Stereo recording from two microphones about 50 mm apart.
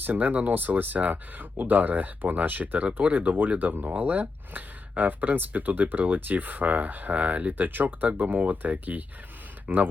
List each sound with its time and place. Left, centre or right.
0.0 s speech: right
3.2 s speech: right